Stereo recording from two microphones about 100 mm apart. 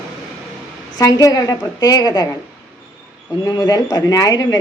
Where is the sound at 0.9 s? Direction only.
35° left (ahead or behind).